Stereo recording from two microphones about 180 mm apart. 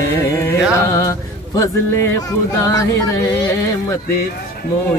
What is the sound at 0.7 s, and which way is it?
Music, 15° left (ahead or behind).